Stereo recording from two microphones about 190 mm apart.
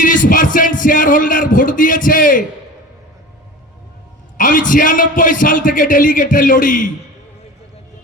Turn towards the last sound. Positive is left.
turn(degrees=45)  # may be behind; listen again after turning